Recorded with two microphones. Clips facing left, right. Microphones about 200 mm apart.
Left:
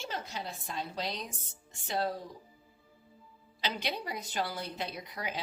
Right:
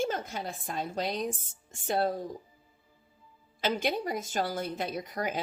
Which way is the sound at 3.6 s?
50° right (ahead or behind).